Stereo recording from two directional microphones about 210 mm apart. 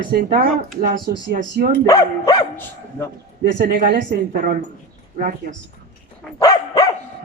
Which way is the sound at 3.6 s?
45° right (ahead or behind).